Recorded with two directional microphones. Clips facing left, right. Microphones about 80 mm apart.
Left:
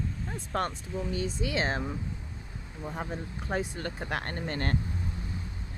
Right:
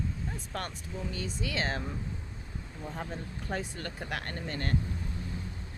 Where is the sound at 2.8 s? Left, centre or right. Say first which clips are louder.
Left 3 dB; centre; by 4.8 s left.